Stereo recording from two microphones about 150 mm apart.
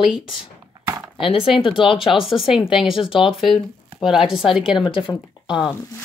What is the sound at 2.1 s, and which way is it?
Speech, centre (ahead or behind).